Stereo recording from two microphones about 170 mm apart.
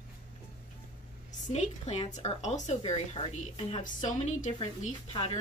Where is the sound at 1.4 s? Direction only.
40° left (ahead or behind).